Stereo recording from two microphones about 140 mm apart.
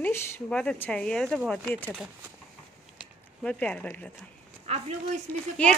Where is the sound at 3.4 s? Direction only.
10° left (ahead or behind).